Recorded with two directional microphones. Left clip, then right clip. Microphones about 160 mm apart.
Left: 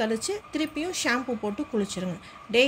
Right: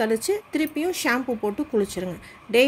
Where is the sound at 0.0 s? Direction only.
50° right (ahead or behind).